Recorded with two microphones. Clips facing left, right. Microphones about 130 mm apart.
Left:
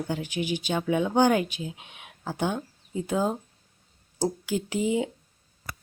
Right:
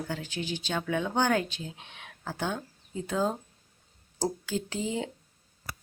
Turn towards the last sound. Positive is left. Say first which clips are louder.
# left 6 dB
turn(degrees=15)  # may be behind; listen again after turning